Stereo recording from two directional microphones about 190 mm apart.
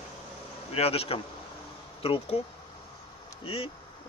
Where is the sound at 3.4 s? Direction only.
30° left (ahead or behind).